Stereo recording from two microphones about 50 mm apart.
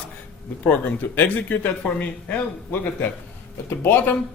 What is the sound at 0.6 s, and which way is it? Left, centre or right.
Speech, left.